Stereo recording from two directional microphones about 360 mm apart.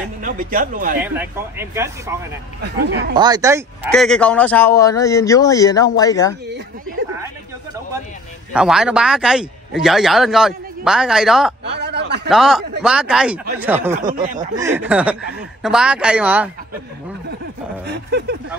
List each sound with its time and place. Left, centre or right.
0.2 s speech: right
1.0 s a man's voice: centre
3.2 s a man's voice: centre
8.5 s a man's voice: centre
11.6 s a sound: right
12.3 s a man's voice: centre; by 14.5 s right
14.6 s a man's voice: centre
17.8 s speech: right